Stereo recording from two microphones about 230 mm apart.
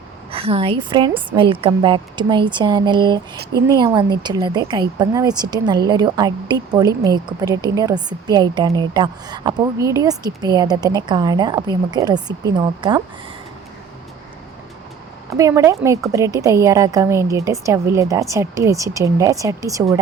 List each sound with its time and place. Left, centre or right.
0.3 s a woman's voice: right
15.4 s speech: centre